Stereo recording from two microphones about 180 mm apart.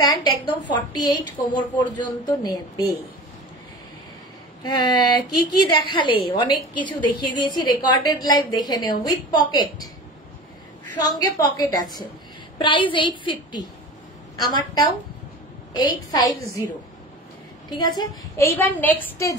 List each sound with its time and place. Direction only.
0.0 s a woman's voice: 25° left (ahead or behind)
4.6 s a woman's voice: 25° left (ahead or behind)
11.1 s a woman's voice: 20° left (ahead or behind)
17.7 s a woman's voice: 25° left (ahead or behind)
18.6 s a woman's voice: 10° left (ahead or behind)